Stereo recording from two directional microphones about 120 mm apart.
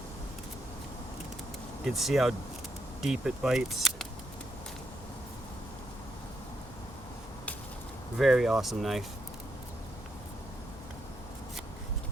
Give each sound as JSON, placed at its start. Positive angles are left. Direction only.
{"t": 1.8, "sound": "speech", "side_deg": 0}
{"t": 8.2, "sound": "speech", "side_deg": -5}